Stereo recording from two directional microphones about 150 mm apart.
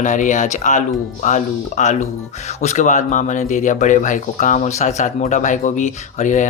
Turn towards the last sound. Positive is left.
turn(degrees=55)  # may be behind; listen again after turning